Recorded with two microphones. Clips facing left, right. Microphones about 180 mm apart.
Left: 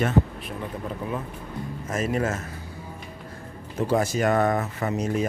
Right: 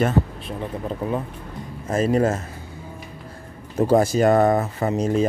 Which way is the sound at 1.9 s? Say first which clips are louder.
Right 7 dB; 30° right (ahead or behind).